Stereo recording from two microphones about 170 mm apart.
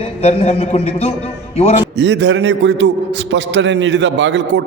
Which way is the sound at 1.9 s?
90° right.